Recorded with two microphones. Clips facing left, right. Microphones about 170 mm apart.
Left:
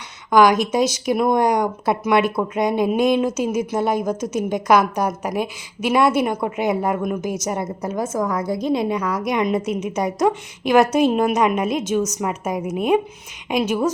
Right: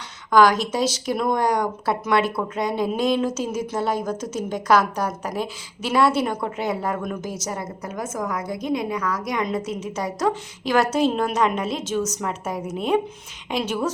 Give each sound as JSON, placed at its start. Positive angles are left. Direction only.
{"t": 0.3, "sound": "a woman's voice", "side_deg": 15}